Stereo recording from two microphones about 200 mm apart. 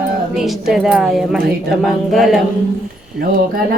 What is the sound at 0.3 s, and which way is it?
A woman's voice, centre (ahead or behind).